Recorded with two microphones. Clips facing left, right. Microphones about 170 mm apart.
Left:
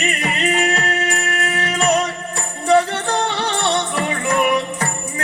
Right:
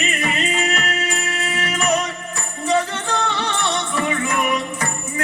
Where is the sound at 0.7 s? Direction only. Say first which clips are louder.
Left 3 dB; 35° left (ahead or behind).